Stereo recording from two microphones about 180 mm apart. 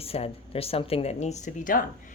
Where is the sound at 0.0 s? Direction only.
35° left (ahead or behind).